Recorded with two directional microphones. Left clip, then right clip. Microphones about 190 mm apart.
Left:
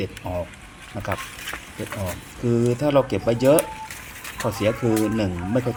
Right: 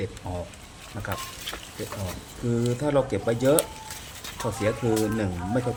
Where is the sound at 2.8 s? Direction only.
10° left (ahead or behind).